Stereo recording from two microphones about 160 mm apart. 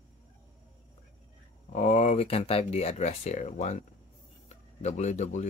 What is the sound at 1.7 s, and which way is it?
Speech, 40° left (ahead or behind).